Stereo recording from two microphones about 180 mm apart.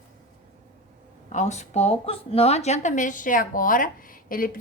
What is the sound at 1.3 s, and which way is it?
A woman's voice, 40° left (ahead or behind).